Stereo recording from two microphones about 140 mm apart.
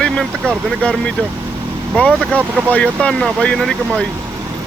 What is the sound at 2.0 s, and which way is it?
Speech, 10° left (ahead or behind).